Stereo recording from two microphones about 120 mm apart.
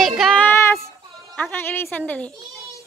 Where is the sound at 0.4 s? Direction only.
20° left (ahead or behind).